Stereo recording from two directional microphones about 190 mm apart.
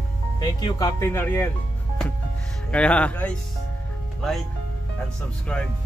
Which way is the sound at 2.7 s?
5° left (ahead or behind).